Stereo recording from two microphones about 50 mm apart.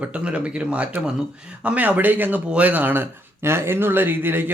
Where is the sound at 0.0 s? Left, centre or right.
Right.